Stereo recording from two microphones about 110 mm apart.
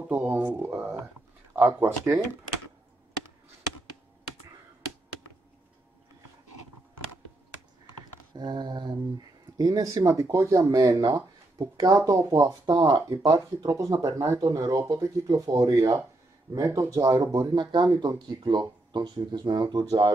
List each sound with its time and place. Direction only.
0.1 s speech: 20° right (ahead or behind)
8.3 s mantra: 40° right (ahead or behind)
9.6 s speech: 35° right (ahead or behind)